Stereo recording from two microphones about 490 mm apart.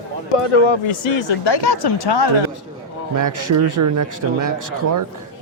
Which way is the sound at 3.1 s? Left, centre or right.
Right.